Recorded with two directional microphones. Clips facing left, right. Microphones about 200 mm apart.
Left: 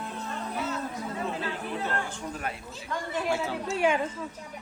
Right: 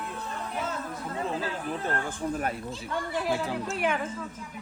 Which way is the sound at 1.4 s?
45° right (ahead or behind).